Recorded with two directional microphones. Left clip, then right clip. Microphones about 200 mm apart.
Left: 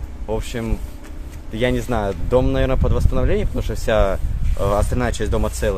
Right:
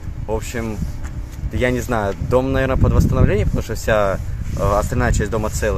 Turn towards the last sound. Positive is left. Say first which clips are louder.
# right 1 dB
turn(degrees=0)  # may be behind; listen again after turning